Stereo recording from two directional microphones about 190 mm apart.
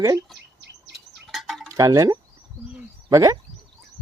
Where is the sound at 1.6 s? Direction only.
15° right (ahead or behind).